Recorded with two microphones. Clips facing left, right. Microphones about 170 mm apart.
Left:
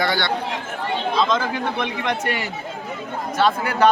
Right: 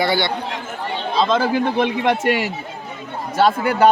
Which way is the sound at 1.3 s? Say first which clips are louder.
Right 5 dB; 30° right (ahead or behind).